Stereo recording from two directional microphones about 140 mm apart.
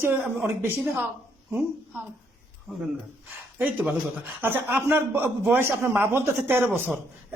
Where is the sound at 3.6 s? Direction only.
10° right (ahead or behind).